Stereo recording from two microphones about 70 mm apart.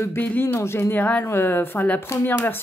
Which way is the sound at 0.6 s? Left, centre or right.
Left.